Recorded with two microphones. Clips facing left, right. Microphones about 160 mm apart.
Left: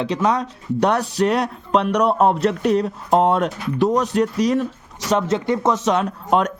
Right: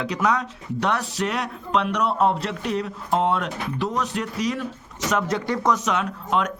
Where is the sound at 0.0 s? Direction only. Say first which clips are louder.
Left 3 dB; 30° left (ahead or behind).